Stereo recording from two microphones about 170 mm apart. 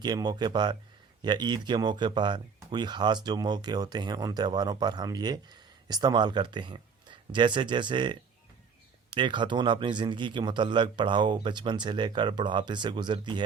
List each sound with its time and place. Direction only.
0.0 s speech: 25° right (ahead or behind)